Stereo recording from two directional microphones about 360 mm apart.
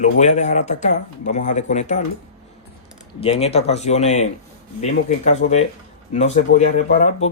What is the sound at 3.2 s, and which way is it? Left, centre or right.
Speech, centre.